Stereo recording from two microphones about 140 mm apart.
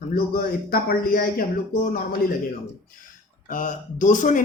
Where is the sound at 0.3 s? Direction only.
90° left.